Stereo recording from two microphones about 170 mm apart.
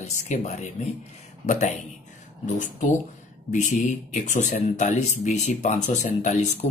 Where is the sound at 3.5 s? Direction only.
45° left (ahead or behind).